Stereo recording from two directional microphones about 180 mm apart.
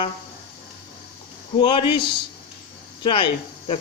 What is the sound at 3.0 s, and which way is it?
Speech, 30° left (ahead or behind).